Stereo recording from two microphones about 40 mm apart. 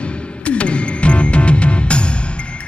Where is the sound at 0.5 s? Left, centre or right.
Left.